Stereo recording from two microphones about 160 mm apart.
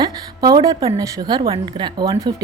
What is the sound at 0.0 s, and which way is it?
A woman's voice, 25° right (ahead or behind).